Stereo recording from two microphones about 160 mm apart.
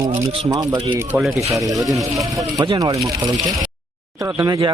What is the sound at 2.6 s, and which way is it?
Speech, 25° right (ahead or behind).